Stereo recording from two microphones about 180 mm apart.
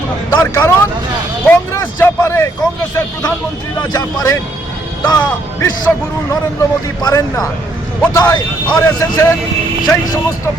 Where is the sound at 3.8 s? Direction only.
20° left (ahead or behind).